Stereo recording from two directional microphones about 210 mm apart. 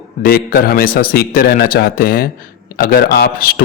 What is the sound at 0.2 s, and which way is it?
A man's voice, 45° left (ahead or behind).